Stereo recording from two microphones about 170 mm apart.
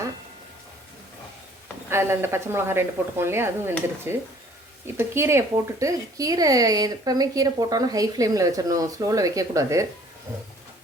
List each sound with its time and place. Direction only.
1.9 s a woman's voice: 15° right (ahead or behind)